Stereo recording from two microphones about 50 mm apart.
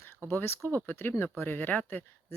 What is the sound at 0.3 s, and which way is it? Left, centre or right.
Speech, left.